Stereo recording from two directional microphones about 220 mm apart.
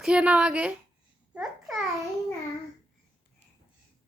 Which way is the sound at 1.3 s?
Centre (ahead or behind).